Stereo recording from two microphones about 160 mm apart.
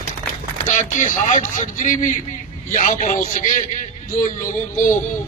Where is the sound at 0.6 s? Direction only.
50° left (ahead or behind).